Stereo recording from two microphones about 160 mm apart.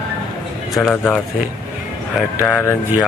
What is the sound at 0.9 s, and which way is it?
Speech, 15° left (ahead or behind).